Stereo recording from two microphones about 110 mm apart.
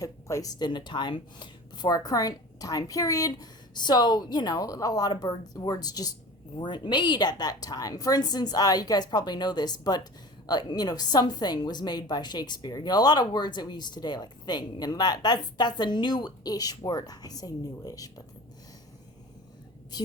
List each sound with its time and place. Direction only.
0.0 s speech: 30° left (ahead or behind)
0.6 s a woman's voice: 45° left (ahead or behind)